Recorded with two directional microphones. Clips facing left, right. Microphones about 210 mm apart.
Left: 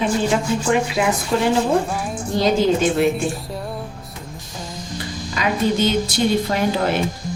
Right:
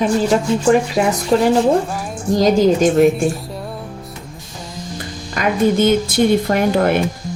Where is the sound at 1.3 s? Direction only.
40° right (ahead or behind).